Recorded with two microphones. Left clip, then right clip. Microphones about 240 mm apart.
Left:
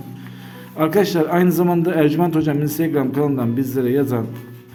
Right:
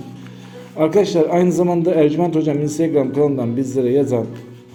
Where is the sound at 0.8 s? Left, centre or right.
Centre.